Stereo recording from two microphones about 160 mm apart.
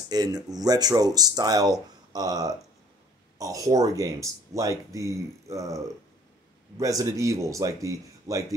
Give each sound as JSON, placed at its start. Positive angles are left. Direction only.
{"t": 0.1, "sound": "speech", "side_deg": -25}
{"t": 6.8, "sound": "speech", "side_deg": -20}